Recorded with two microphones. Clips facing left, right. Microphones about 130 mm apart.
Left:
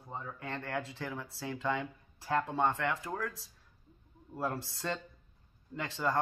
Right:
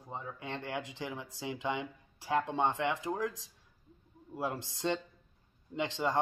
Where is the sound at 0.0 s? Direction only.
20° right (ahead or behind).